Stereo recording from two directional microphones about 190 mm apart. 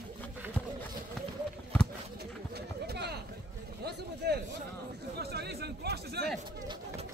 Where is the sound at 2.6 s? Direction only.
60° right (ahead or behind).